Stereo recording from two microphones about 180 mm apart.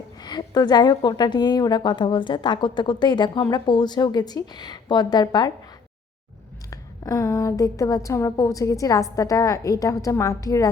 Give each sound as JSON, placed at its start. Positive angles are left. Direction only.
{"t": 0.2, "sound": "a woman's voice", "side_deg": 20}
{"t": 6.7, "sound": "a woman's voice", "side_deg": 20}